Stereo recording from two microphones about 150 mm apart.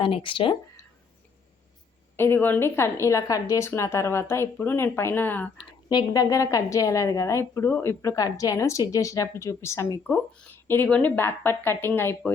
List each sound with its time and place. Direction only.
0.0 s speech: 35° left (ahead or behind)
2.1 s speech: 15° left (ahead or behind)
5.9 s a woman's voice: 25° left (ahead or behind)